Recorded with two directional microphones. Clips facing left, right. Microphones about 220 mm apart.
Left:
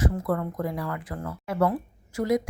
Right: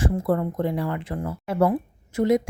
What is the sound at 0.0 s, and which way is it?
A woman's voice, 30° right (ahead or behind).